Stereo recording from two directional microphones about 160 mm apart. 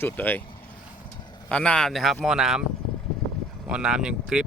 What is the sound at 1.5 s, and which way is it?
Speech, 5° left (ahead or behind).